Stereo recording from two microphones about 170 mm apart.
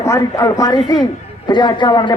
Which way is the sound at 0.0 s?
20° left (ahead or behind).